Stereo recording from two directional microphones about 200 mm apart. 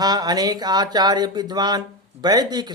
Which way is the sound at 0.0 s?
20° right (ahead or behind).